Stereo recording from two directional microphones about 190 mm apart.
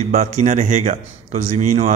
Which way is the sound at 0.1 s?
40° right (ahead or behind).